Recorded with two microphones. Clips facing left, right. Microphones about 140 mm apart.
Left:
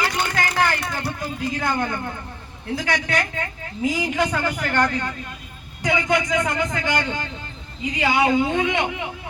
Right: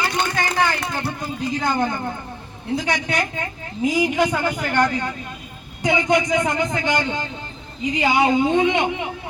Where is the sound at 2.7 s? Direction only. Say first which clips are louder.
Right 1 dB; 20° right (ahead or behind).